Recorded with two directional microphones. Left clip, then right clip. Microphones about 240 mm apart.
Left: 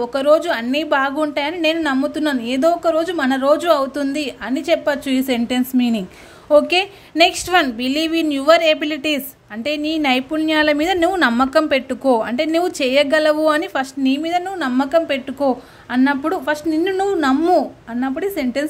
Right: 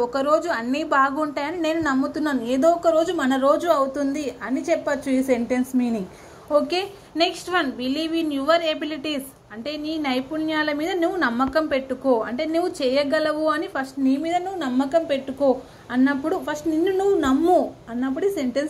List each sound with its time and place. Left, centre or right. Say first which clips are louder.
0.0 s a woman's voice: left 5 dB; left
4.1 s a woman's voice: left 4 dB; left
6.5 s a woman's voice: left 8 dB; left